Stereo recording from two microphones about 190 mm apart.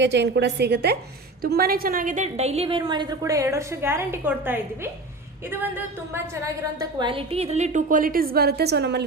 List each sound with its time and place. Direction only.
0.0 s a woman's voice: 65° right (ahead or behind); by 4.9 s 10° right (ahead or behind)
6.7 s a woman's voice: 25° right (ahead or behind); by 9.0 s 60° right (ahead or behind)